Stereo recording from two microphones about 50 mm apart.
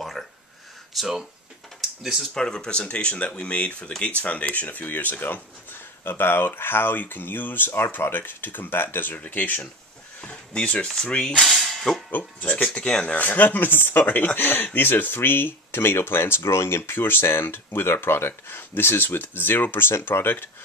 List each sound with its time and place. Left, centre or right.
0.9 s speech: centre
2.3 s speech: centre; by 5.4 s left
6.0 s speech: left
11.4 s a sound: centre
12.1 s speech: left
12.7 s speech: centre
13.0 s speech: left